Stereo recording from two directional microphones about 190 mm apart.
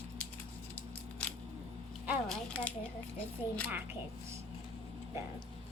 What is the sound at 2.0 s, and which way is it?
Speech, 5° left (ahead or behind).